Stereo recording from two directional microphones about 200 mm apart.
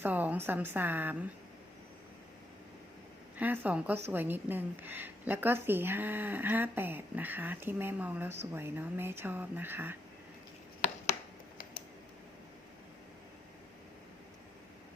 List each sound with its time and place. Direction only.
0.0 s a woman's voice: 10° right (ahead or behind)
3.3 s a woman's voice: 10° right (ahead or behind)
10.8 s a sound: 35° left (ahead or behind)